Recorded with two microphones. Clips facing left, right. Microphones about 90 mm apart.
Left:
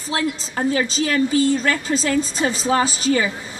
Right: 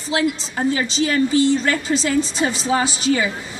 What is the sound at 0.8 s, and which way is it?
A woman's voice, 45° left (ahead or behind).